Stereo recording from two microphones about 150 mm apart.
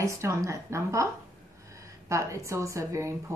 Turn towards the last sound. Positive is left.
turn(degrees=-20)  # may be behind; listen again after turning